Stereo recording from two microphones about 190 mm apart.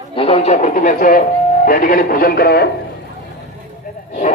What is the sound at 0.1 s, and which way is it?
Speech, 30° left (ahead or behind).